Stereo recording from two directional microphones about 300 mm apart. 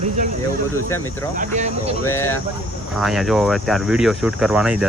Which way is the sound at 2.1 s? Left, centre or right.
Centre.